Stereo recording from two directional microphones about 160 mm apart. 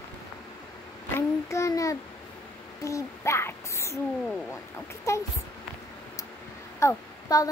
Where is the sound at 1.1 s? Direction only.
20° left (ahead or behind).